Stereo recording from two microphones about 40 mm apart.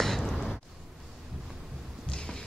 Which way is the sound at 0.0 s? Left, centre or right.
Centre.